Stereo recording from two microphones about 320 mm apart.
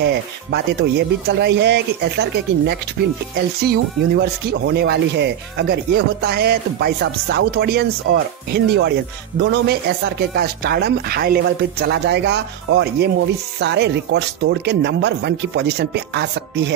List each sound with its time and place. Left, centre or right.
0.0 s speech: right